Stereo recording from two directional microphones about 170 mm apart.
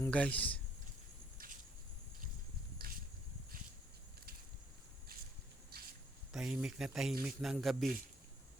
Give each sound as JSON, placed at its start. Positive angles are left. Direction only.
{"t": 0.0, "sound": "a man's voice", "side_deg": 10}
{"t": 5.7, "sound": "a sound", "side_deg": -65}
{"t": 6.3, "sound": "speech", "side_deg": -5}